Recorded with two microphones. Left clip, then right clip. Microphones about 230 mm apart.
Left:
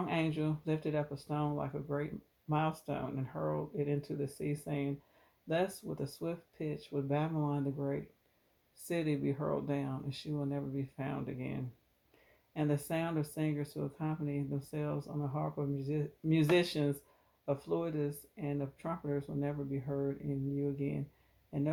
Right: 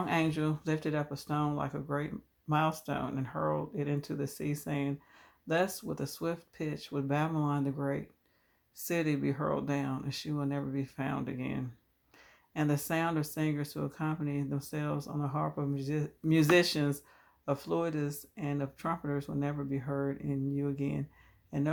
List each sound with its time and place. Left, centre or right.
0.0 s speech: right